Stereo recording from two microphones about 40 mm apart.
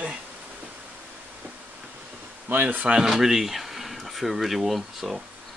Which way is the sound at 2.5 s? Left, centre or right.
Right.